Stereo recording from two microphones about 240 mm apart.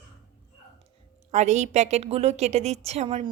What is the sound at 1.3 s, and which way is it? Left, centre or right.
A woman's voice, right.